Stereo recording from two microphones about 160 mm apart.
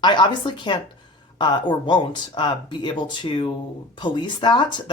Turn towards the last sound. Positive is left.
turn(degrees=30)  # may be behind; listen again after turning